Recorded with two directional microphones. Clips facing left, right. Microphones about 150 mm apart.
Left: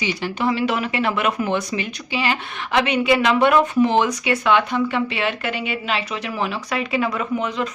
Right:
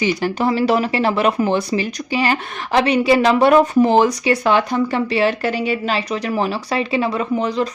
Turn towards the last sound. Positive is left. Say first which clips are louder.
# right 4 dB
turn(degrees=-35)  # may be behind; listen again after turning